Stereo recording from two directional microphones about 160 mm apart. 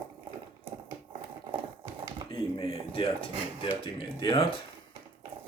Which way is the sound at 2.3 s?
35° left (ahead or behind).